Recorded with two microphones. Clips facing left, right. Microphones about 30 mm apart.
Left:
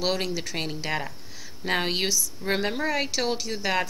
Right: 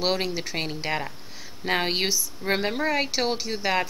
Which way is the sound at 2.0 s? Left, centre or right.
Centre.